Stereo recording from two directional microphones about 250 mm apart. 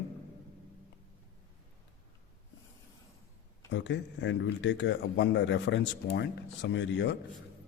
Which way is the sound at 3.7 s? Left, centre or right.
Left.